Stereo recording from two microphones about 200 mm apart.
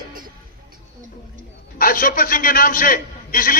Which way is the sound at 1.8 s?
45° left (ahead or behind).